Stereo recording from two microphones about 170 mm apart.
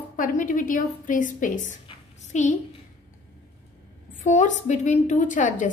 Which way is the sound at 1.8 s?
45° left (ahead or behind).